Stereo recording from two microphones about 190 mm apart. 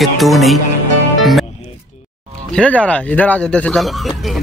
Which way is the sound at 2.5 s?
5° left (ahead or behind).